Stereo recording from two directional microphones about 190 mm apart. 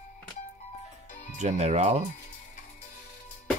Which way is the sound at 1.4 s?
35° right (ahead or behind).